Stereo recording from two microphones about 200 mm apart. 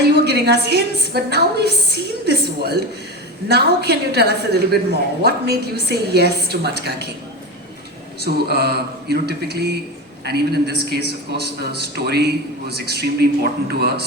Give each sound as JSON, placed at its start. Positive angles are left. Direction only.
{"t": 0.3, "sound": "a woman's voice", "side_deg": -55}
{"t": 8.2, "sound": "a woman's voice", "side_deg": -55}